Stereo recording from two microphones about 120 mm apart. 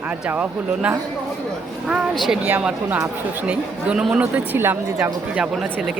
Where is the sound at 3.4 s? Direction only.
10° right (ahead or behind).